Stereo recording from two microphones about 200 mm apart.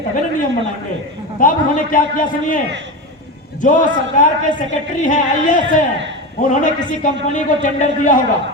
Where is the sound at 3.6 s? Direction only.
40° left (ahead or behind).